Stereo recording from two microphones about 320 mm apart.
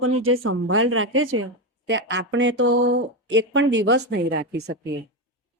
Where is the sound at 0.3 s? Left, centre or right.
Right.